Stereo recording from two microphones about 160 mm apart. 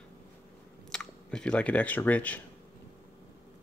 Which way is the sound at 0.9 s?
5° left (ahead or behind).